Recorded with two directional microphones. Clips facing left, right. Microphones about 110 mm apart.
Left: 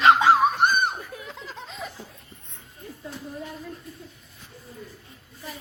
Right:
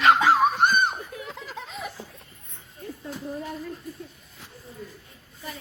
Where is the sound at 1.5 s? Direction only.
10° right (ahead or behind).